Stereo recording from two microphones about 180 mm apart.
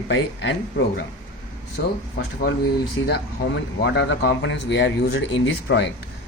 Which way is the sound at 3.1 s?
65° left (ahead or behind).